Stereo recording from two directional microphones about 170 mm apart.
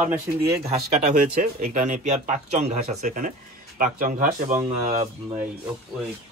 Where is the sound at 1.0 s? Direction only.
45° right (ahead or behind).